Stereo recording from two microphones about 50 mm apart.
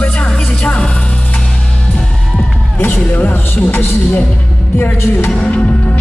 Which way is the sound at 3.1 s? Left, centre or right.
Left.